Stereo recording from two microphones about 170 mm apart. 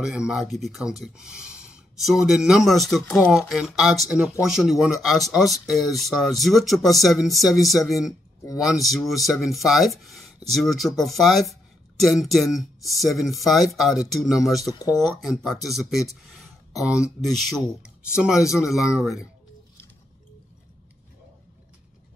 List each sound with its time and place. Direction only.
0.0 s speech: 5° right (ahead or behind)
14.7 s speech: 20° left (ahead or behind)
15.0 s speech: centre (ahead or behind)